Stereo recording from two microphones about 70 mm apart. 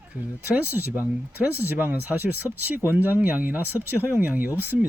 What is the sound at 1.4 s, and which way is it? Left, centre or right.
Speech, right.